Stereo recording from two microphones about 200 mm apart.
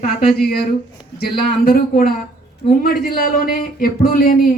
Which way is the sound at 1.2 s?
50° left (ahead or behind).